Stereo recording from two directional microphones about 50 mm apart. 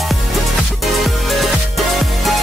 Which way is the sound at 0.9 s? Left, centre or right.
Centre.